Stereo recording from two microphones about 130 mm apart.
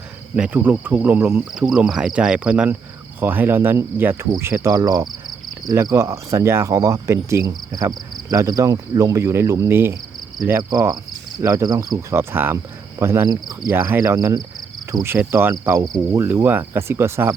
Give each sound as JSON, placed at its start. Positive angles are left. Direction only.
{"t": 0.3, "sound": "speech", "side_deg": -10}
{"t": 4.3, "sound": "cricket", "side_deg": -20}
{"t": 10.6, "sound": "cricket", "side_deg": -30}
{"t": 12.1, "sound": "speech", "side_deg": -15}
{"t": 13.0, "sound": "cricket", "side_deg": -20}
{"t": 15.0, "sound": "speech", "side_deg": -20}
{"t": 15.6, "sound": "cricket", "side_deg": -20}
{"t": 16.1, "sound": "speech", "side_deg": -20}